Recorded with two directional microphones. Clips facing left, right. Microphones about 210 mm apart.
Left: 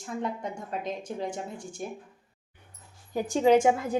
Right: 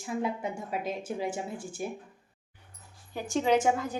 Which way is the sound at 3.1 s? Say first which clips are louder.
Left 5 dB; 35° left (ahead or behind).